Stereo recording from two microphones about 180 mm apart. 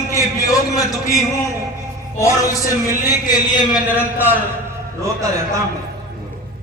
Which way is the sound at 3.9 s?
10° right (ahead or behind).